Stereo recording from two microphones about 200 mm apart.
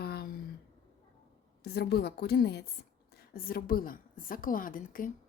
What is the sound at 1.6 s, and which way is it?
A woman's voice, 55° left (ahead or behind).